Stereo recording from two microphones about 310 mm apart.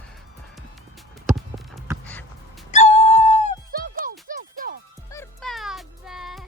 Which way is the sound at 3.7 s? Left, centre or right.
Right.